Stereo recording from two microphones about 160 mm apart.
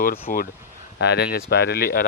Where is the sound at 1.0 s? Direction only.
90° left; by 2.0 s 70° left (ahead or behind).